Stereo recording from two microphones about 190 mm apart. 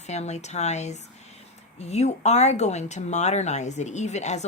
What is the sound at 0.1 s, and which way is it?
Speech, 35° left (ahead or behind).